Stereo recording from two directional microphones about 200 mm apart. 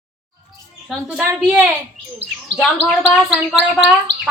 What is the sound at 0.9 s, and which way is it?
Speech, 5° right (ahead or behind).